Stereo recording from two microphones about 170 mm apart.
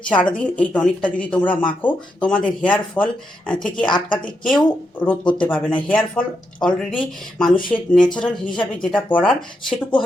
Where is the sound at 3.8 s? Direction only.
30° left (ahead or behind).